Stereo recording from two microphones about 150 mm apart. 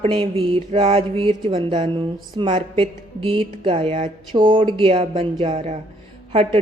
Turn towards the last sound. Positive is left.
turn(degrees=-40)  # may be behind; listen again after turning